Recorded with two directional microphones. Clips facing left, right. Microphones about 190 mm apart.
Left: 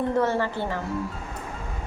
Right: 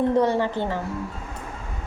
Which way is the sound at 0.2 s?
15° right (ahead or behind).